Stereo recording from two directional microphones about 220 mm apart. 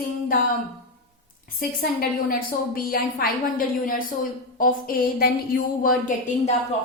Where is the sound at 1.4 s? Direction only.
40° left (ahead or behind).